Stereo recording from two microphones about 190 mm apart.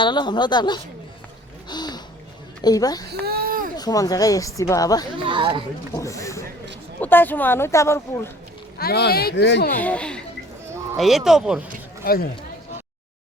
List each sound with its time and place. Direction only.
0.0 s a woman's voice: 25° left (ahead or behind)
1.7 s a sound: 20° left (ahead or behind)
2.6 s a woman's voice: 20° left (ahead or behind)
3.1 s a sound: 55° right (ahead or behind)
3.8 s a woman's voice: 20° left (ahead or behind)
5.1 s speech: 25° right (ahead or behind)
5.9 s speech: 15° left (ahead or behind)
8.8 s speech: 55° left (ahead or behind)
9.8 s speech: 5° left (ahead or behind)
12.0 s speech: 50° left (ahead or behind)